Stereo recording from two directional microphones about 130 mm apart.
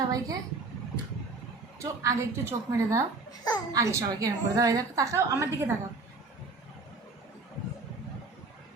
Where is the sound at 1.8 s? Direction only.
25° right (ahead or behind).